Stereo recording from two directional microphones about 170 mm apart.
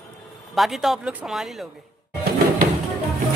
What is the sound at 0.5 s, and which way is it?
Speech, centre (ahead or behind).